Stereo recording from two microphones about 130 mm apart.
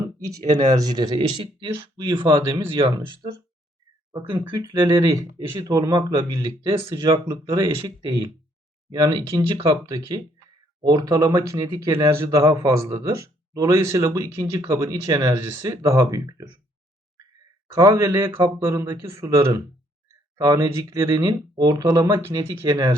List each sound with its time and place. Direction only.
0.9 s speech: 30° right (ahead or behind)
4.5 s speech: 30° right (ahead or behind)
17.7 s speech: 25° right (ahead or behind)